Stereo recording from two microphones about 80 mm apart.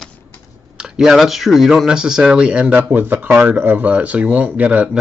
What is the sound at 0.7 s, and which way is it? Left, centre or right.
Speech, centre.